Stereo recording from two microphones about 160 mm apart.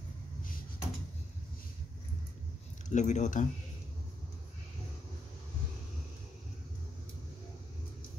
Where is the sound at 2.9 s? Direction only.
50° left (ahead or behind).